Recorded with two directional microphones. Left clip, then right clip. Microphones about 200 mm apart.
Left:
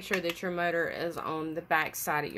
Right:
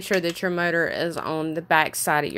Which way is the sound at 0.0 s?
45° right (ahead or behind).